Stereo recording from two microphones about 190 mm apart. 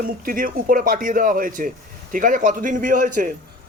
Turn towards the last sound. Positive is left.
turn(degrees=-45)  # may be behind; listen again after turning